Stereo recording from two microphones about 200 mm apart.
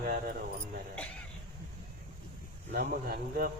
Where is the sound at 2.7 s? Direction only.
50° right (ahead or behind).